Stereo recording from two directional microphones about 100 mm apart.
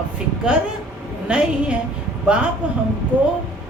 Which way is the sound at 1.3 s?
10° right (ahead or behind).